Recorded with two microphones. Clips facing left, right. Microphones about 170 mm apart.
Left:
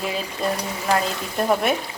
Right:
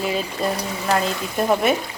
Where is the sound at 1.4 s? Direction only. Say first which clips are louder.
Right 2 dB; centre (ahead or behind).